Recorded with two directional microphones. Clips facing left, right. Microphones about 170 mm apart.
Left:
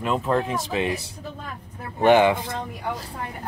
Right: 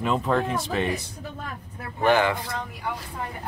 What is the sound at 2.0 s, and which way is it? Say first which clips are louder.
Speech: left 4 dB; 20° left (ahead or behind).